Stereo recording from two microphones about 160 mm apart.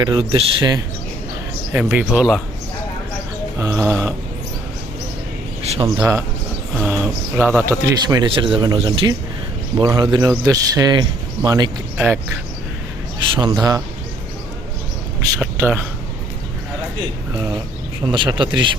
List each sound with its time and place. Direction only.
0.0 s speech: 30° right (ahead or behind)
1.7 s speech: 10° right (ahead or behind)
3.6 s a sound: 15° right (ahead or behind)
5.6 s speech: 40° right (ahead or behind)
6.0 s a sound: 15° right (ahead or behind)
6.7 s speech: 5° right (ahead or behind)
7.9 s speech: 25° right (ahead or behind)
11.9 s speech: 15° right (ahead or behind)
13.3 s speech: 25° right (ahead or behind)
15.4 s speech: 10° right (ahead or behind)
18.1 s a man's voice: 30° right (ahead or behind)